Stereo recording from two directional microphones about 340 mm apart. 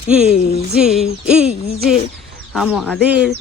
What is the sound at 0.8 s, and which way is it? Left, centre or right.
Speech, centre.